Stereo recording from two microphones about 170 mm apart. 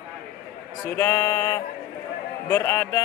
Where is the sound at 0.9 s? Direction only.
15° left (ahead or behind).